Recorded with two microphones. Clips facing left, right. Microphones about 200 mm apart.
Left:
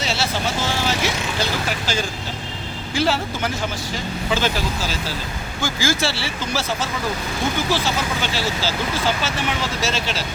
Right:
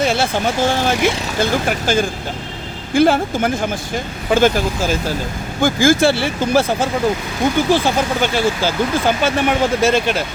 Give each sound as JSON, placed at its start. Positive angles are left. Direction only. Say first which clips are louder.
{"t": 0.0, "sound": "speech", "louder": "right 7 dB", "side_deg": -55}